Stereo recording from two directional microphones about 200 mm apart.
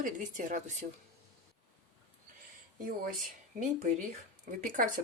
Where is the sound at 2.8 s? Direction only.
45° right (ahead or behind).